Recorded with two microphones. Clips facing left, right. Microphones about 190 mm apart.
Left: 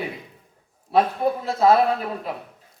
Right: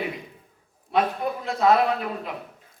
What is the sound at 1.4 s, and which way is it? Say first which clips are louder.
Speech: left 2 dB; 30° left (ahead or behind).